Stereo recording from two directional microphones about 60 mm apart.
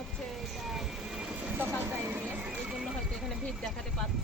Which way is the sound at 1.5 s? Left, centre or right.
Right.